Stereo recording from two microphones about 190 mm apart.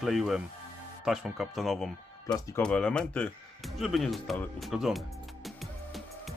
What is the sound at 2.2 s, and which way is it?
Speech, 15° left (ahead or behind).